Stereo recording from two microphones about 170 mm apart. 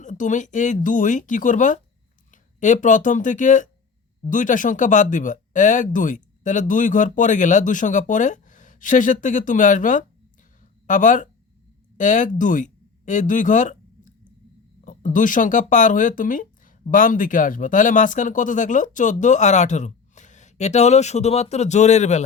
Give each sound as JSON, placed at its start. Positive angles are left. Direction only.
{"t": 0.0, "sound": "speech", "side_deg": 45}
{"t": 10.6, "sound": "a sound", "side_deg": 50}
{"t": 11.9, "sound": "speech", "side_deg": 45}